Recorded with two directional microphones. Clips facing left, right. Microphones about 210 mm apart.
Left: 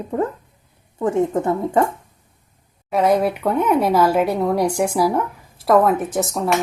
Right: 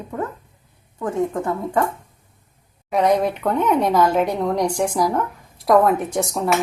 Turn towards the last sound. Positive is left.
turn(degrees=0)  # may be behind; listen again after turning